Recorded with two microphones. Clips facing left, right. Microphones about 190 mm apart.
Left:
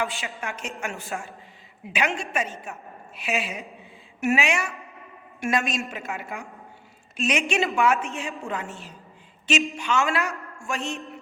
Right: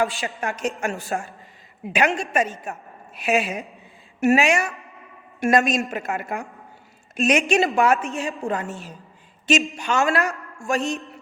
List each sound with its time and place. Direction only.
0.0 s a woman's voice: 35° right (ahead or behind)